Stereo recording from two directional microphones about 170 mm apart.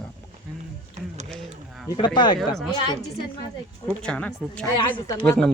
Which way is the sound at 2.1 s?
25° left (ahead or behind).